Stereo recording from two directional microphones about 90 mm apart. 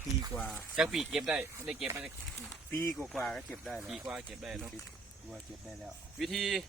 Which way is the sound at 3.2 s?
5° left (ahead or behind).